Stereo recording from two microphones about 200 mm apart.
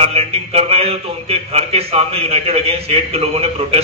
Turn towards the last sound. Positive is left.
turn(degrees=-30)  # may be behind; listen again after turning